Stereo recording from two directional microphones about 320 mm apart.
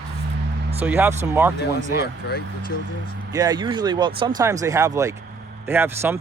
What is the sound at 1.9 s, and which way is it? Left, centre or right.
Speech, left.